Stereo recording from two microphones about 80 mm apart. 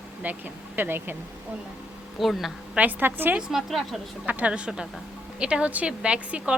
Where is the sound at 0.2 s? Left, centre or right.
Right.